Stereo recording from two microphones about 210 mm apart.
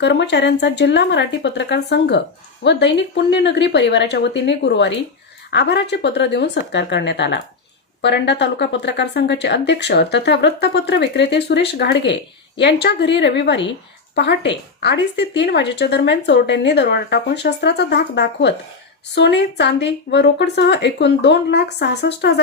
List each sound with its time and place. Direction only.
0.0 s a woman's voice: 55° left (ahead or behind)